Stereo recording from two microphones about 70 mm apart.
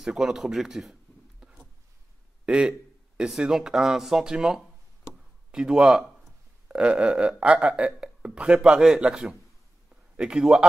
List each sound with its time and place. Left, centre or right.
0.0 s a man's voice: centre
2.4 s speech: centre